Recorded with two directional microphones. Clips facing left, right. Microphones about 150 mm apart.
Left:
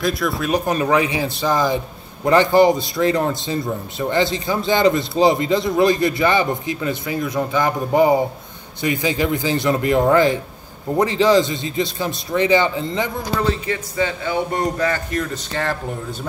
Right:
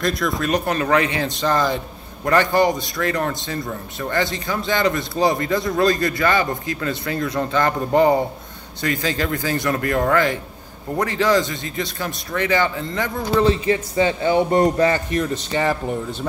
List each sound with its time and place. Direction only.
0.0 s a man's voice: 5° left (ahead or behind)
2.5 s a man's voice: 30° left (ahead or behind)
13.7 s a man's voice: 30° right (ahead or behind)
15.5 s speech: 5° right (ahead or behind)